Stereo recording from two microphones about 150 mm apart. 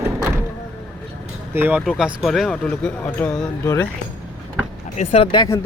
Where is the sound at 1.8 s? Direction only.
Centre (ahead or behind).